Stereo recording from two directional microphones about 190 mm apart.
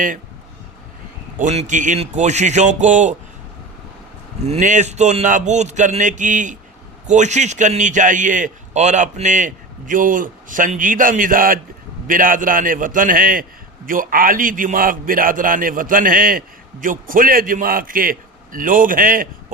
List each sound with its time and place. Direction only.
1.4 s speech: 40° right (ahead or behind)
4.4 s a man's voice: 35° right (ahead or behind)